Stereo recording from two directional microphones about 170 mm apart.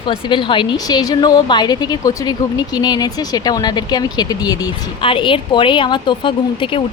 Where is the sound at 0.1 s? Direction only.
30° left (ahead or behind).